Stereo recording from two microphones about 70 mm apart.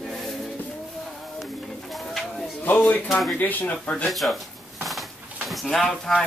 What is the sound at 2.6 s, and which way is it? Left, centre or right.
Speech, left.